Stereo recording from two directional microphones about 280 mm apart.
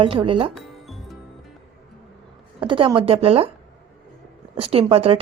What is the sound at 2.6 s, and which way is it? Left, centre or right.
Speech, centre.